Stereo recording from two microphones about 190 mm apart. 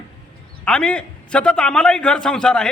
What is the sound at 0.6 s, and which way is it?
A man's voice, 5° left (ahead or behind).